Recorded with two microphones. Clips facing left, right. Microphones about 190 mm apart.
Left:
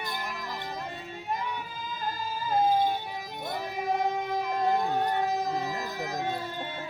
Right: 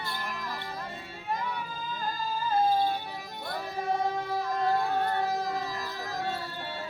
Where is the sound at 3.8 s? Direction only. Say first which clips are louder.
Left 1 dB; 15° left (ahead or behind).